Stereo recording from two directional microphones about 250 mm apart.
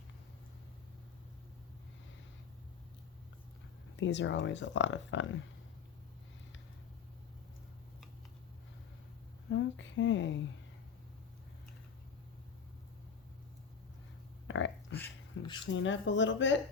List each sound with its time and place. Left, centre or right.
3.9 s speech: left
9.5 s speech: left
14.4 s a sound: left
15.6 s speech: left